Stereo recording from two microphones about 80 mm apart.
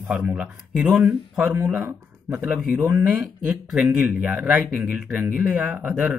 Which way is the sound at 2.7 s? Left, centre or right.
Right.